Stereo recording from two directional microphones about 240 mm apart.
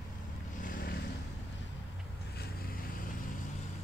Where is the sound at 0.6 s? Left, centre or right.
Left.